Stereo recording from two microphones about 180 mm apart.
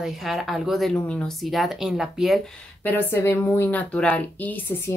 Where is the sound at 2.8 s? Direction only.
10° left (ahead or behind).